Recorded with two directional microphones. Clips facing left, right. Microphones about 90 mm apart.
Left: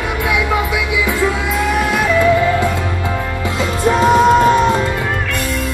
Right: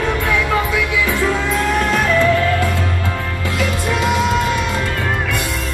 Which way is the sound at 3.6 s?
35° left (ahead or behind).